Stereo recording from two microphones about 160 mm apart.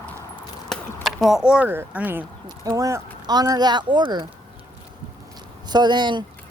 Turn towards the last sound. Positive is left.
turn(degrees=-30)  # may be behind; listen again after turning